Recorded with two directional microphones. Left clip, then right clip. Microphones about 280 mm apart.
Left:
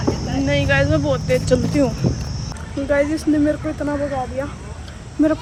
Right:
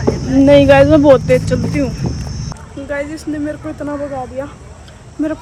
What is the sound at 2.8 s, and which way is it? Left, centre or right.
Speech, centre.